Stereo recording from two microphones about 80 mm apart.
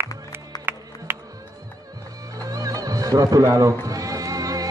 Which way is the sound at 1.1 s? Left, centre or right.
Right.